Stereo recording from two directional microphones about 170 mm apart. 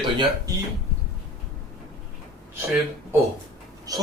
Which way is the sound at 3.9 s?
20° right (ahead or behind).